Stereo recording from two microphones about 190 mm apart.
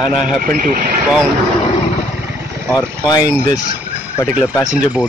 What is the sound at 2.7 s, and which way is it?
Speech, 20° left (ahead or behind).